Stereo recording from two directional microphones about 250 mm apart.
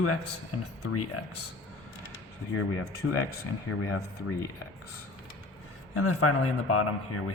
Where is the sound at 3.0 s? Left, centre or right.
Left.